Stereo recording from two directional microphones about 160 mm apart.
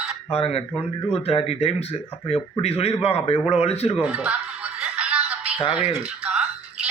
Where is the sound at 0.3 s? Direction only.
40° left (ahead or behind).